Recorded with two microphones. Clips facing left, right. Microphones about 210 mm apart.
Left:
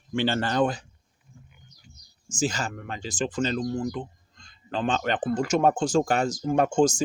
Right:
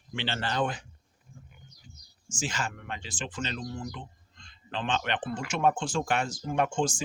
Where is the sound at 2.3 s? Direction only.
40° left (ahead or behind).